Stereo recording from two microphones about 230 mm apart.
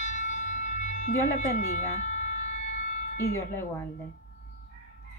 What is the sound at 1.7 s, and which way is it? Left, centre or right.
Siren, left.